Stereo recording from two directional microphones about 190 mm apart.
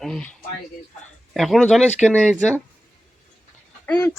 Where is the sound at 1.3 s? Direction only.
Centre (ahead or behind).